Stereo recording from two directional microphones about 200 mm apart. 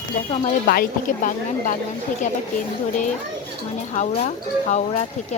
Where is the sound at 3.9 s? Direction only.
35° left (ahead or behind).